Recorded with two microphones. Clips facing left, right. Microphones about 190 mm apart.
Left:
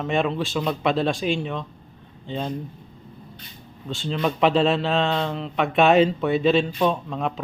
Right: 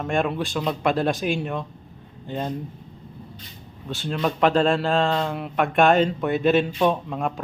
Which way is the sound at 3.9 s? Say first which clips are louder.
Even; centre (ahead or behind).